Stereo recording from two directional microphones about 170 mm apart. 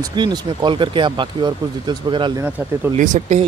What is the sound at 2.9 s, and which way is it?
Speech, 45° right (ahead or behind).